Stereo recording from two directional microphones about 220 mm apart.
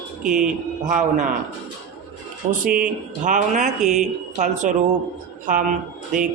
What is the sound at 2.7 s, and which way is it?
Speech, 35° right (ahead or behind).